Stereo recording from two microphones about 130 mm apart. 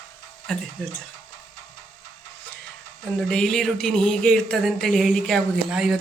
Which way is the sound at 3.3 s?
5° left (ahead or behind).